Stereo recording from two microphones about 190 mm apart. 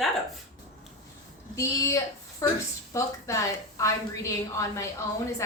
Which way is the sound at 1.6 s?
15° left (ahead or behind).